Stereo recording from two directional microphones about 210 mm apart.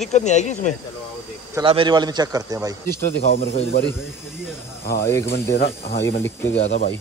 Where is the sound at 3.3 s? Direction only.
45° left (ahead or behind).